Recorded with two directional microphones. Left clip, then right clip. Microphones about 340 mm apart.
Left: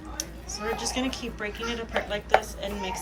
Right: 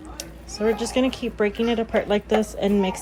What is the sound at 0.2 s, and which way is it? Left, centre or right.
A woman's voice, centre.